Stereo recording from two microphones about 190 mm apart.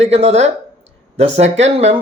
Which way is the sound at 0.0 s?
35° right (ahead or behind).